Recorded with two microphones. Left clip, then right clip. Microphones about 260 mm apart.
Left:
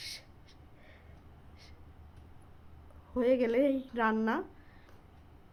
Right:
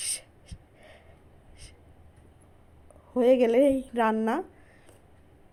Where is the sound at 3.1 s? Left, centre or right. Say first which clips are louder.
Right 7 dB; centre.